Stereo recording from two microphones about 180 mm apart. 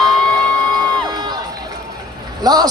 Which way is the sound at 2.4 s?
20° right (ahead or behind).